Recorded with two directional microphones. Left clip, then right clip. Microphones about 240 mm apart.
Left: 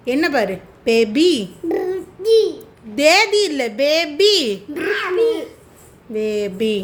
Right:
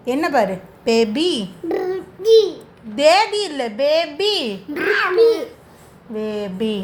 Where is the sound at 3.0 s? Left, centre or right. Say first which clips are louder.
Left 1 dB; left.